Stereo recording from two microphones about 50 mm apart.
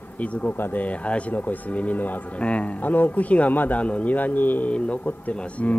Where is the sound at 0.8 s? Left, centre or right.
Left.